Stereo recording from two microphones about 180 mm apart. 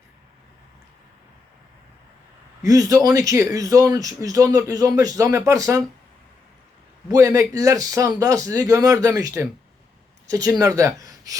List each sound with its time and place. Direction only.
2.6 s a man's voice: 20° right (ahead or behind)
7.1 s a man's voice: 20° right (ahead or behind)